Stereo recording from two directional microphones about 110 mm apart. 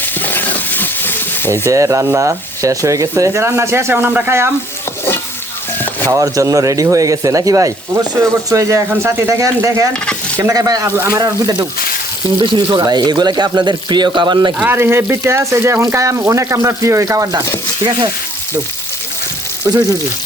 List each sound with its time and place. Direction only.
0.0 s a sound: 15° left (ahead or behind)
1.6 s speech: 30° right (ahead or behind)
6.1 s speech: 30° right (ahead or behind); by 14.5 s 45° right (ahead or behind)
14.7 s speech: 20° right (ahead or behind)